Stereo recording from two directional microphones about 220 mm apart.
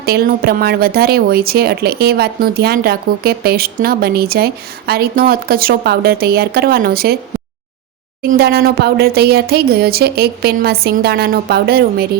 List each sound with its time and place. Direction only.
0.0 s speech: 45° right (ahead or behind)
8.2 s speech: 45° right (ahead or behind)